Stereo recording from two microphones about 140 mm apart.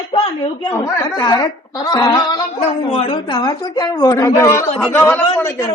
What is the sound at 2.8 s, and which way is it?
A woman's voice, 45° left (ahead or behind).